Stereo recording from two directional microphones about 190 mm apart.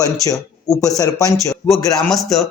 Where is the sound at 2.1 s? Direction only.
Centre (ahead or behind).